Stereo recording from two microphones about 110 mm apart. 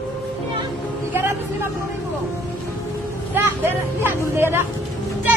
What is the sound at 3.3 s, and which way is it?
Vehicle, 20° right (ahead or behind).